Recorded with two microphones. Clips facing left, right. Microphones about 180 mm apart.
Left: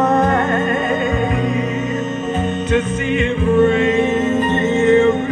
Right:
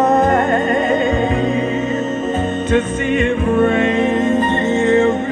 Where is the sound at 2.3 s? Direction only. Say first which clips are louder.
Right 1 dB; 45° right (ahead or behind).